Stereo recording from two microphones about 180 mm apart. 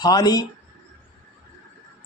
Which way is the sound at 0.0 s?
20° left (ahead or behind).